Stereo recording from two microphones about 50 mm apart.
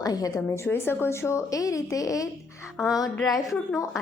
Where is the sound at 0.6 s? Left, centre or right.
Left.